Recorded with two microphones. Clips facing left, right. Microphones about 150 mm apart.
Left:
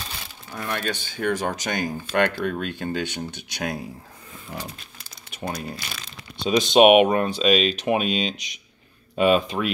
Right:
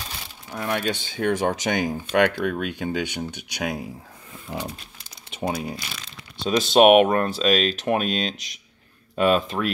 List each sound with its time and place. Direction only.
0.5 s speech: 15° right (ahead or behind)
5.3 s speech: 10° right (ahead or behind); by 9.7 s 5° left (ahead or behind)